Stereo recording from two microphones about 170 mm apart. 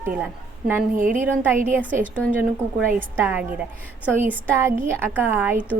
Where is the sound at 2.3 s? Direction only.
10° right (ahead or behind).